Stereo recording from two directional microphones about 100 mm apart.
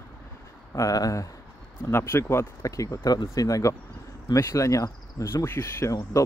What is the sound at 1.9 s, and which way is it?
Speech, 25° left (ahead or behind).